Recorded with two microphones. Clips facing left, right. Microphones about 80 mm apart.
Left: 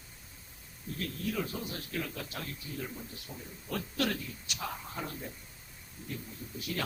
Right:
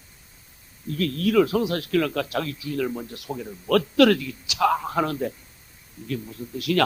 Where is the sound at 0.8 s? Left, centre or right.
Right.